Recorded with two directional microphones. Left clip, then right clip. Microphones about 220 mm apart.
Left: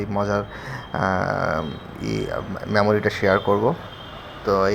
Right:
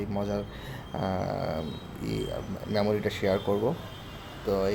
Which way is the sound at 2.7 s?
Centre (ahead or behind).